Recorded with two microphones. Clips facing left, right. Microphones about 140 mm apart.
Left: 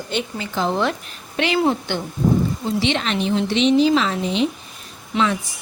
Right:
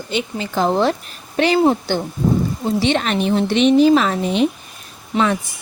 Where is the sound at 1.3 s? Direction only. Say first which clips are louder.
Right 4 dB; 35° right (ahead or behind).